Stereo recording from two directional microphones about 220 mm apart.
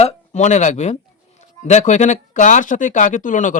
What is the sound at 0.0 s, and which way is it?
Speech, 30° left (ahead or behind).